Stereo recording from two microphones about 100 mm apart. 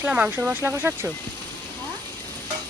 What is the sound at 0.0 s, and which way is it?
Speech, 15° right (ahead or behind).